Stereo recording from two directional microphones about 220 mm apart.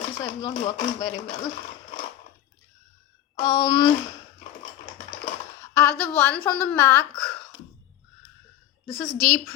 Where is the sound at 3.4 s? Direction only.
20° left (ahead or behind).